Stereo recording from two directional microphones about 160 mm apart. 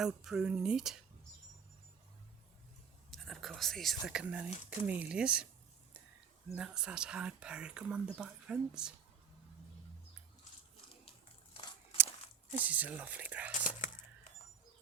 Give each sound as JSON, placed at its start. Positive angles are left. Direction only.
{"t": 0.0, "sound": "speech", "side_deg": -5}
{"t": 3.1, "sound": "speech", "side_deg": 0}
{"t": 6.6, "sound": "speech", "side_deg": -5}
{"t": 11.5, "sound": "a sound", "side_deg": 35}
{"t": 12.6, "sound": "speech", "side_deg": -10}
{"t": 13.5, "sound": "whispering", "side_deg": 50}